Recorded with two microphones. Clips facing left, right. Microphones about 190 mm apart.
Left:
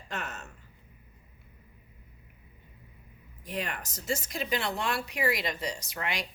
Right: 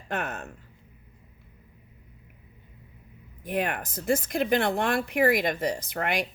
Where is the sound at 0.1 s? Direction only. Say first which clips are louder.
Right 7 dB; 55° right (ahead or behind).